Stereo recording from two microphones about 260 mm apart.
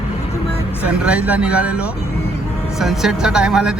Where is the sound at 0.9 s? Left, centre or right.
Centre.